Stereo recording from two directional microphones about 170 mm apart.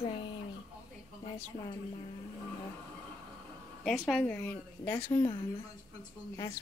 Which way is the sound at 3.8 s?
5° left (ahead or behind).